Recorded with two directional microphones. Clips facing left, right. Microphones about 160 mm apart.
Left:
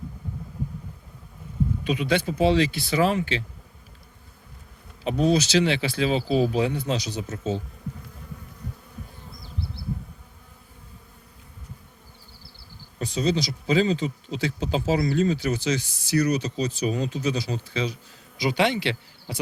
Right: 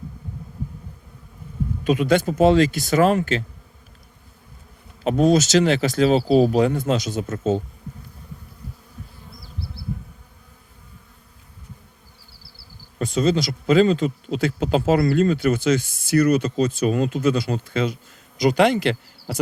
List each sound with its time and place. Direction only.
1.8 s speech: 45° right (ahead or behind)
5.0 s speech: 45° right (ahead or behind)
13.0 s a man's voice: 50° right (ahead or behind)